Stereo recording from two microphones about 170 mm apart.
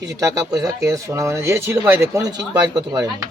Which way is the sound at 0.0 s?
20° right (ahead or behind).